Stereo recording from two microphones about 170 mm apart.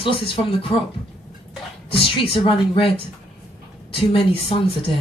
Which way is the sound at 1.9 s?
30° left (ahead or behind).